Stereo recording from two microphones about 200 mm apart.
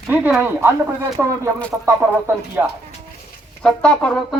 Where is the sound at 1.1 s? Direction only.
5° left (ahead or behind).